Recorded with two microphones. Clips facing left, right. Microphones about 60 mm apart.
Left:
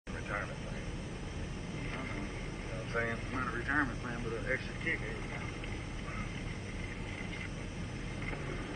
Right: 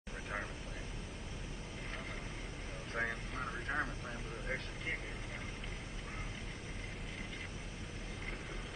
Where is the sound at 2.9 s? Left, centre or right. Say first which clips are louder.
Left 3 dB; left.